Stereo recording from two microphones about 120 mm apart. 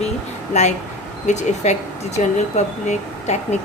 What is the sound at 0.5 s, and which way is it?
A woman's voice, 70° left (ahead or behind).